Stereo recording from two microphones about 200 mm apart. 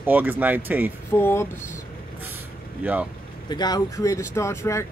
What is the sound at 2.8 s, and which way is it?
Speech, 10° right (ahead or behind).